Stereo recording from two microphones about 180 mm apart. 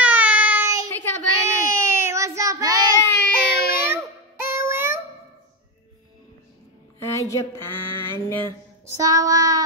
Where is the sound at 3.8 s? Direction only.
15° right (ahead or behind).